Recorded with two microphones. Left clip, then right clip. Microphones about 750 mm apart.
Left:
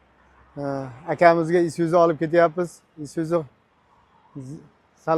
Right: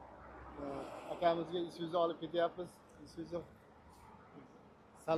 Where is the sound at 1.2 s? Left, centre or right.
Left.